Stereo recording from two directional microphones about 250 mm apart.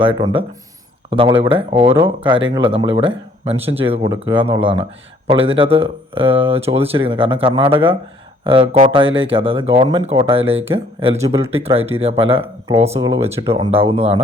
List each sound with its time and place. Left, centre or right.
0.0 s speech: right